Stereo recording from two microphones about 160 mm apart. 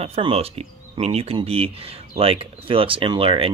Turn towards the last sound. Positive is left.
turn(degrees=-35)  # may be behind; listen again after turning